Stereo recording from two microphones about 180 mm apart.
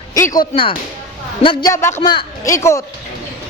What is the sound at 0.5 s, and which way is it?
Speech, 35° left (ahead or behind).